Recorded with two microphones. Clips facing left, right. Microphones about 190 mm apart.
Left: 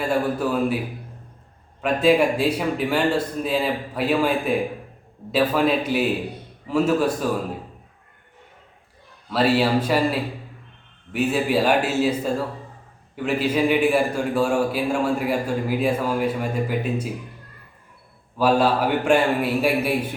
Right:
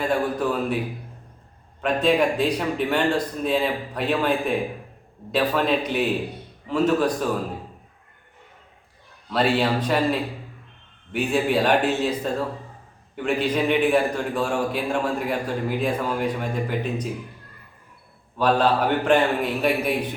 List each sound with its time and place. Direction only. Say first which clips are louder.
0.3 s a man's voice: left 2 dB; 5° left (ahead or behind)
1.8 s a man's voice: left 2 dB; 5° left (ahead or behind)
9.3 s a man's voice: left 2 dB; 5° left (ahead or behind)
18.3 s a man's voice: left 1 dB; 10° left (ahead or behind)